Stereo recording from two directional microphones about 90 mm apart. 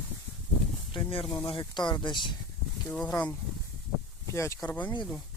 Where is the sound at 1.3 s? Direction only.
65° left (ahead or behind).